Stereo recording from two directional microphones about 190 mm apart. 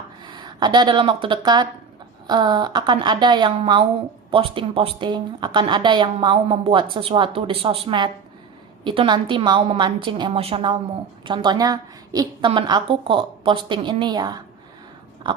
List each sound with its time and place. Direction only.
0.3 s a woman's voice: 25° right (ahead or behind)